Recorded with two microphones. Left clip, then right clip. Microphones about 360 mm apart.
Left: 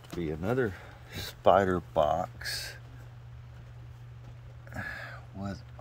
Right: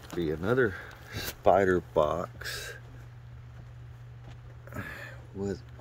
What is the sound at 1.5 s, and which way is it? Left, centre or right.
Speech, left.